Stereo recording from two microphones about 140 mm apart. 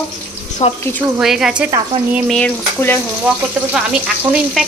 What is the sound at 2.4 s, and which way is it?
Stir, 15° left (ahead or behind).